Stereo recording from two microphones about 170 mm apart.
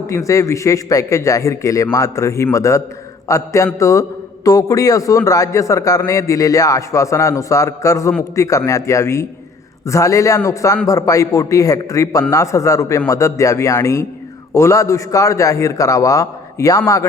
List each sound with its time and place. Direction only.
0.1 s a man's voice: 20° left (ahead or behind)